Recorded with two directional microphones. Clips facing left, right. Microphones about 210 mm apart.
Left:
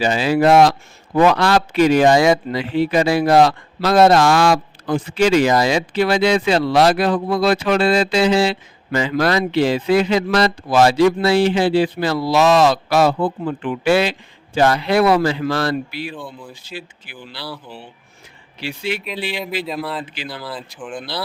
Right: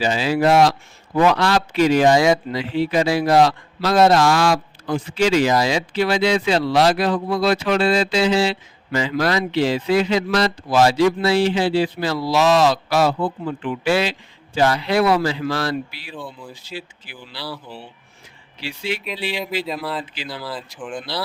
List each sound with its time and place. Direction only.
0.0 s a man's voice: 55° left (ahead or behind)
16.1 s speech: centre (ahead or behind)
17.1 s speech: 55° left (ahead or behind)
17.4 s speech: centre (ahead or behind)
18.6 s a man's voice: 55° left (ahead or behind)
19.6 s speech: centre (ahead or behind)